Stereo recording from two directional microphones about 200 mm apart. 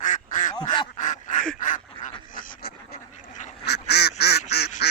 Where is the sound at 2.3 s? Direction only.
50° left (ahead or behind).